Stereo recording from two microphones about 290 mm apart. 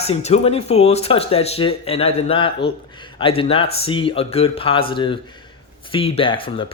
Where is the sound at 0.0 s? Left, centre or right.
Left.